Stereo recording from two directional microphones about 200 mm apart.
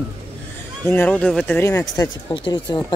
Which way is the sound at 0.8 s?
10° left (ahead or behind).